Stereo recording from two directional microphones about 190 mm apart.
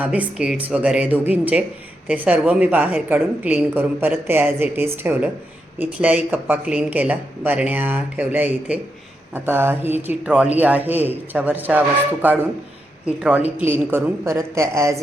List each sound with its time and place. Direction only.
0.0 s a woman's voice: 5° right (ahead or behind)